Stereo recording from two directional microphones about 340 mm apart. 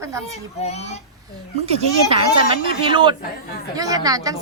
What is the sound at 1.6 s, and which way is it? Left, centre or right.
Speech, centre.